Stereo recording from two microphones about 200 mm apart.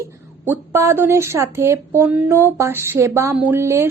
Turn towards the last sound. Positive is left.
turn(degrees=-15)  # may be behind; listen again after turning